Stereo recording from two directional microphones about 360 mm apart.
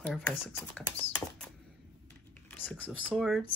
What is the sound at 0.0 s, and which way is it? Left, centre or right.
Speech, centre.